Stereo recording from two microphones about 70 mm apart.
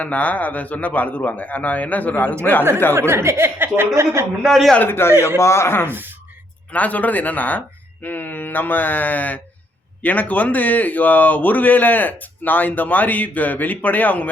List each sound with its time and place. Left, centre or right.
0.0 s speech: left
3.1 s a woman's voice: right
4.4 s a man's voice: centre
4.9 s speech: left
5.9 s speech: right
6.7 s speech: left